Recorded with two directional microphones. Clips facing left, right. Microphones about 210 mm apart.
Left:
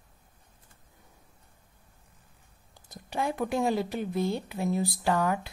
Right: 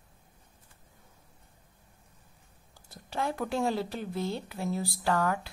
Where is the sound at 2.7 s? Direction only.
15° left (ahead or behind).